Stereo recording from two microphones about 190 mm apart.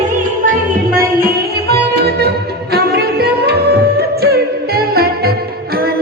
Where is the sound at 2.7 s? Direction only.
55° right (ahead or behind).